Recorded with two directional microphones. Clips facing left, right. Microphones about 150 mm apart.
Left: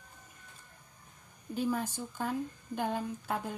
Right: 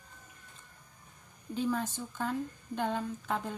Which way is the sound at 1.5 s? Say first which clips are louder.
Even; 10° left (ahead or behind).